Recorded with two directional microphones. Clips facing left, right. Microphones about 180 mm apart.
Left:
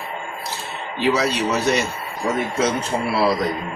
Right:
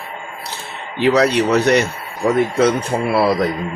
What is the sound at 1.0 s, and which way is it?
Speech, 60° right (ahead or behind).